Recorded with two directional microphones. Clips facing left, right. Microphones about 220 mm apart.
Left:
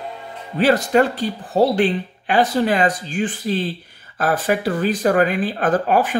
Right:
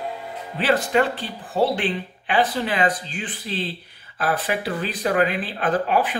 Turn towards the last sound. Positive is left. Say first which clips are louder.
# left 4 dB
turn(degrees=45)  # may be behind; listen again after turning